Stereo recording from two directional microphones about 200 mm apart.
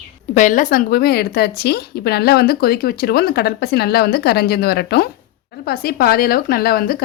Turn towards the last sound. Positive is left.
turn(degrees=50)  # may be behind; listen again after turning